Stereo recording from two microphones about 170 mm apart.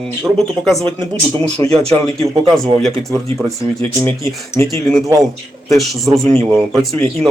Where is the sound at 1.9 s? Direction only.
20° left (ahead or behind).